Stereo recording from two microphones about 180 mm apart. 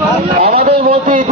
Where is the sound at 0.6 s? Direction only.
60° right (ahead or behind).